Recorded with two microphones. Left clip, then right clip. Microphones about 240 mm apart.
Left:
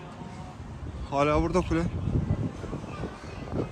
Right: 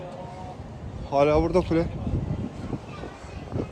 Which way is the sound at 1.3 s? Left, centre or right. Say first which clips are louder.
Right 4 dB; centre.